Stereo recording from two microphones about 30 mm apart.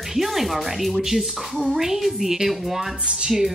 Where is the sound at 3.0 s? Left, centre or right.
Right.